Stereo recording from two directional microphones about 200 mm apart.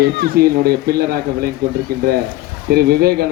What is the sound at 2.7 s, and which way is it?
Speech, 50° right (ahead or behind).